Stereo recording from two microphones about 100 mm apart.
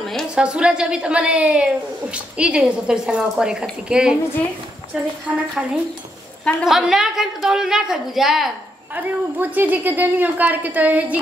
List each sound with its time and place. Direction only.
0.0 s a sound: 5° left (ahead or behind)
0.3 s a woman's voice: 10° right (ahead or behind)
8.9 s a woman's voice: 15° right (ahead or behind)